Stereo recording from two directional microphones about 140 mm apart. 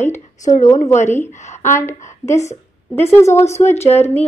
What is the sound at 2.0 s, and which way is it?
Speech, 55° left (ahead or behind).